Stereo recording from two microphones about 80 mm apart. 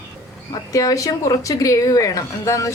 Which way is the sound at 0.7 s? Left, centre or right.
Left.